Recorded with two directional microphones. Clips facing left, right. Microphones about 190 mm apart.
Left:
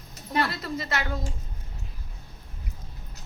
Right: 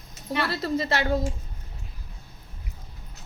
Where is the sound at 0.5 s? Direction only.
30° right (ahead or behind).